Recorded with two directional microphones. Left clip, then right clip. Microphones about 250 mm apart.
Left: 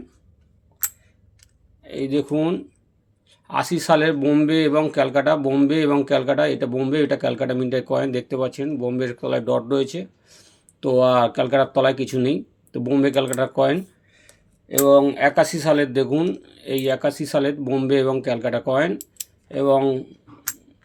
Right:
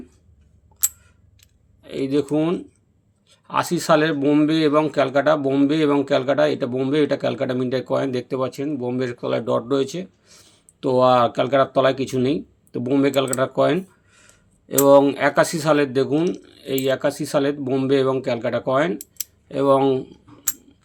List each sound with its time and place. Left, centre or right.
1.8 s speech: centre
14.8 s speech: centre